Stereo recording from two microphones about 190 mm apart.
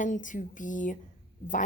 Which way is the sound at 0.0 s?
40° left (ahead or behind).